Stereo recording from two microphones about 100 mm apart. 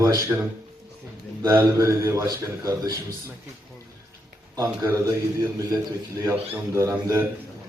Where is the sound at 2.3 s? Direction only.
35° right (ahead or behind).